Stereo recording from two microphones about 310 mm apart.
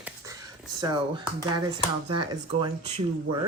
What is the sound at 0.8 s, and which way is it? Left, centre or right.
Speech, centre.